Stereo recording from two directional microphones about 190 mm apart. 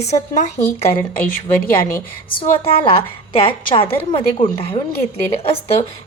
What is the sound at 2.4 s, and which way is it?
A woman's voice, 30° left (ahead or behind).